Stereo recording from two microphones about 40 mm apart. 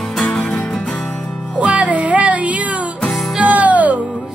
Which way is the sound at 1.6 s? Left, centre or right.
Right.